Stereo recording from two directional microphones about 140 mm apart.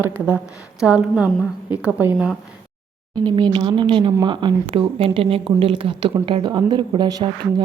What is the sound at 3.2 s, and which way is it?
Speech, 35° right (ahead or behind).